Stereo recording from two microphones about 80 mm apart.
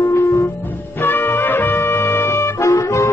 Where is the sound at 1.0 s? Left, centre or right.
Left.